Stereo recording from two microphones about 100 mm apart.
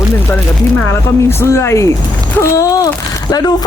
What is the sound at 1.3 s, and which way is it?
Speech, 25° left (ahead or behind).